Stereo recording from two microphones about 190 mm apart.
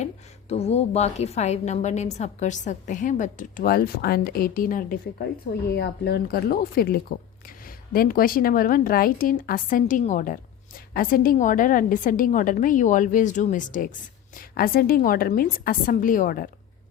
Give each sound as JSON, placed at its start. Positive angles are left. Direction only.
{"t": 0.0, "sound": "a woman's voice", "side_deg": 35}
{"t": 5.7, "sound": "a woman's voice", "side_deg": 60}